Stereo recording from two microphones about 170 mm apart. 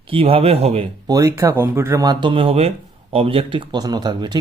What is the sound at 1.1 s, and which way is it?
Speech, 20° right (ahead or behind).